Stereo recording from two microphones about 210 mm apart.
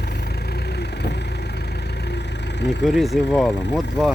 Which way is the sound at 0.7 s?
50° left (ahead or behind).